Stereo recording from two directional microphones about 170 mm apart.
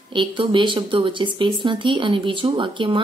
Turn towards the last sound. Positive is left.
turn(degrees=-30)  # may be behind; listen again after turning